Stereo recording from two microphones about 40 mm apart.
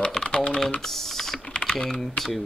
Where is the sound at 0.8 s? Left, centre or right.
Centre.